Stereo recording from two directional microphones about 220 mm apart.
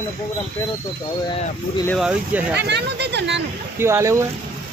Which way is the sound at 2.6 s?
50° right (ahead or behind).